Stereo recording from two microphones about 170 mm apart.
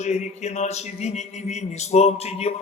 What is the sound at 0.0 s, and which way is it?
Speech, 45° left (ahead or behind).